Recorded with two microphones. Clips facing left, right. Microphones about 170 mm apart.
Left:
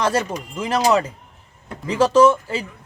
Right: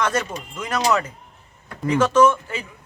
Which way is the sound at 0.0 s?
30° left (ahead or behind).